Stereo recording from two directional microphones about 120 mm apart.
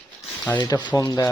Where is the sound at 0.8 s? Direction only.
30° left (ahead or behind).